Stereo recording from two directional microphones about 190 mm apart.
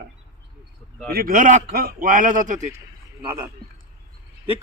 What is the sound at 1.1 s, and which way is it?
A man's voice, 50° right (ahead or behind).